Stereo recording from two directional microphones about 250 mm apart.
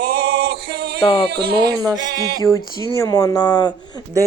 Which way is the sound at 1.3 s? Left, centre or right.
Right.